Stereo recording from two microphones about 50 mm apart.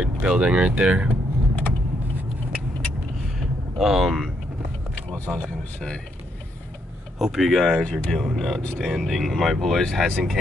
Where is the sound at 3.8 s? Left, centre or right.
Centre.